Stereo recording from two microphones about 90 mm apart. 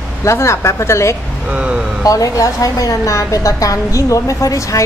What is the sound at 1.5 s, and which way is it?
Speech, 15° right (ahead or behind).